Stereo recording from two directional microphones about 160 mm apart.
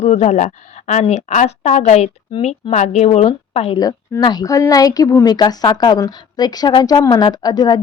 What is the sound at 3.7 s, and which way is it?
Speech, 25° left (ahead or behind).